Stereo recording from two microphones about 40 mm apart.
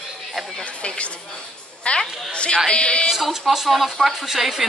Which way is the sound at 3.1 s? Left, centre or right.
Centre.